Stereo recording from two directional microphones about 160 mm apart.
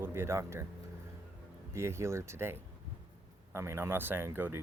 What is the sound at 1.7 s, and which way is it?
Speech, 15° right (ahead or behind).